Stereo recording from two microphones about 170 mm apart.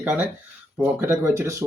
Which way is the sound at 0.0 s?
10° right (ahead or behind).